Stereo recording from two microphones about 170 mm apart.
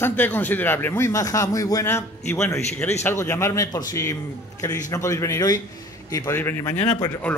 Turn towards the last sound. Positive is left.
turn(degrees=10)  # may be behind; listen again after turning